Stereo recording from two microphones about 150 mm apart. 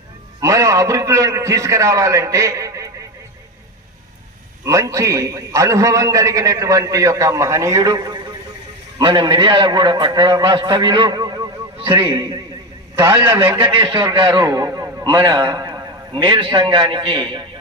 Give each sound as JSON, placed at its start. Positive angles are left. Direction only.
{"t": 0.3, "sound": "a man's voice", "side_deg": -20}
{"t": 4.6, "sound": "a man's voice", "side_deg": -20}
{"t": 13.6, "sound": "a man's voice", "side_deg": -35}